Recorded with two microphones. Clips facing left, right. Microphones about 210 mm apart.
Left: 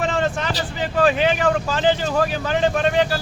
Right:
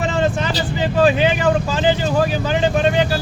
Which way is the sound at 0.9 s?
5° right (ahead or behind).